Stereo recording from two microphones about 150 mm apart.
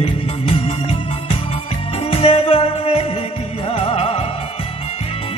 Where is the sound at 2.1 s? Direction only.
40° left (ahead or behind).